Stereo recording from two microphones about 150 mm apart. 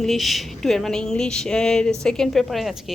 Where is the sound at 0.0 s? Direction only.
Centre (ahead or behind).